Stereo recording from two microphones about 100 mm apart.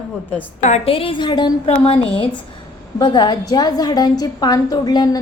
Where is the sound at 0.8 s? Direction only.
60° left (ahead or behind).